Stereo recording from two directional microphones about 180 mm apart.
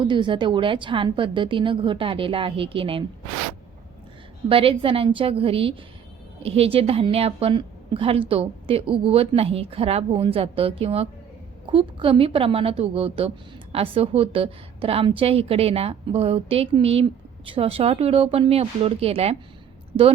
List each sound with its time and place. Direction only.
0.0 s a woman's voice: 25° right (ahead or behind)
4.4 s a woman's voice: 30° right (ahead or behind)